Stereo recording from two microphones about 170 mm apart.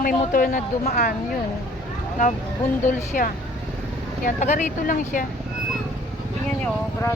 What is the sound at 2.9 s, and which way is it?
Speech, 55° left (ahead or behind).